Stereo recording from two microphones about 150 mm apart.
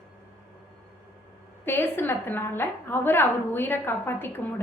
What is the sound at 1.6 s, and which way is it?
A woman's voice, 15° left (ahead or behind).